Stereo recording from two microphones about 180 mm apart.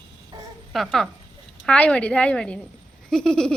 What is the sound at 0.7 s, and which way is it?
A woman's voice, centre (ahead or behind).